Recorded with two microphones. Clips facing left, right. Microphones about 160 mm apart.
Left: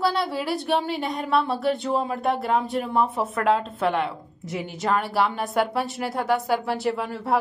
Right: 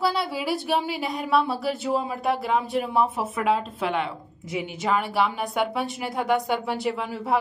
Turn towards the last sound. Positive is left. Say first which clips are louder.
# left 1 dB
turn(degrees=0)  # may be behind; listen again after turning